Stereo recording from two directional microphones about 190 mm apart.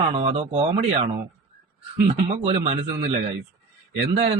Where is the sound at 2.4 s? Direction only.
30° right (ahead or behind).